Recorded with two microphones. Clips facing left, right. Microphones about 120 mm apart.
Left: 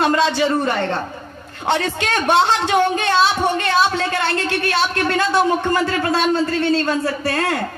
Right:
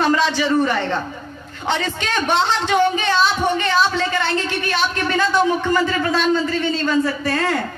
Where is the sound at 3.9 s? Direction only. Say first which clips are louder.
Even; 55° left (ahead or behind).